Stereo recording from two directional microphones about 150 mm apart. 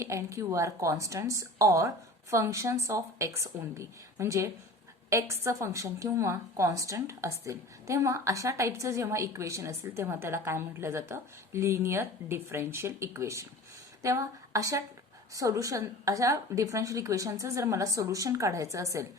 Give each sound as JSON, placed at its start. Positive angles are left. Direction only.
{"t": 0.0, "sound": "a woman's voice", "side_deg": -20}